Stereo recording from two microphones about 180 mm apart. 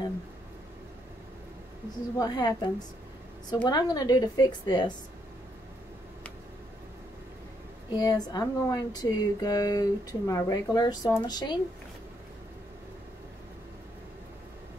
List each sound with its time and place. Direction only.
2.1 s speech: 20° left (ahead or behind)
7.9 s speech: 20° left (ahead or behind)